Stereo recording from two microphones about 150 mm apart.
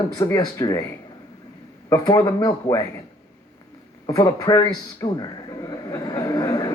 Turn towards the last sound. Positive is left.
turn(degrees=25)  # may be behind; listen again after turning